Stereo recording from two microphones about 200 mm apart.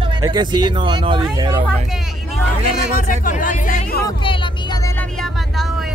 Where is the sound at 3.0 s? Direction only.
40° left (ahead or behind).